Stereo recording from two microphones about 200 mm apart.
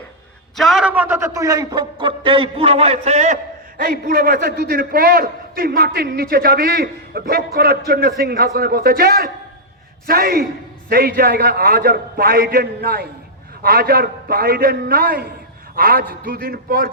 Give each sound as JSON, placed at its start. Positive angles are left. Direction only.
{"t": 0.5, "sound": "a man's voice", "side_deg": 0}
{"t": 3.8, "sound": "a man's voice", "side_deg": -45}